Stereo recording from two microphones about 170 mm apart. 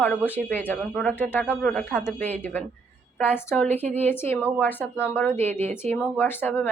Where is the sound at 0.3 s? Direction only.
10° left (ahead or behind).